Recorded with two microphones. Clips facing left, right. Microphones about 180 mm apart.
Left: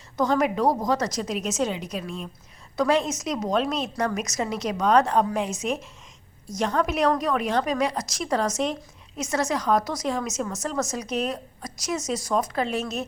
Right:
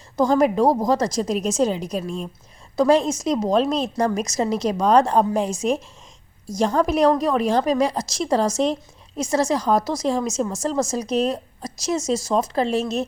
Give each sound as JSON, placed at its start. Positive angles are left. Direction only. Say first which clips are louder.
{"t": 0.2, "sound": "a woman's voice", "louder": "right 5 dB", "side_deg": -35}